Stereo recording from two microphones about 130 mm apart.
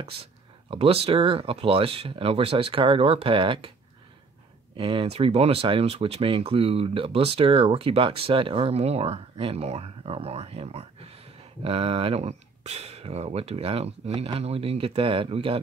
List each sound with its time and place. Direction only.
0.0 s speech: 50° right (ahead or behind)
4.7 s speech: 45° right (ahead or behind)